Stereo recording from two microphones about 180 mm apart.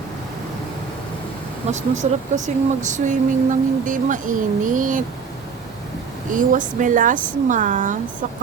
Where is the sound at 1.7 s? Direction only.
40° right (ahead or behind).